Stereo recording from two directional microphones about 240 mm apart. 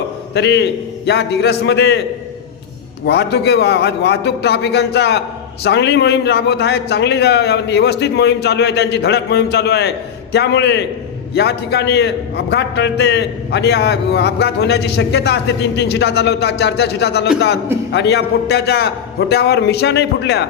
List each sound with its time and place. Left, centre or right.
0.3 s a man's voice: left
3.1 s a man's voice: left